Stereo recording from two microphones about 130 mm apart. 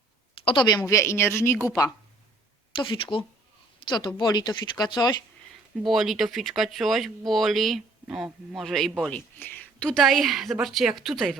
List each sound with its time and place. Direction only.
0.4 s speech: 35° left (ahead or behind)
0.8 s speech: 20° left (ahead or behind)
2.7 s speech: 40° left (ahead or behind)
5.7 s a man's voice: centre (ahead or behind)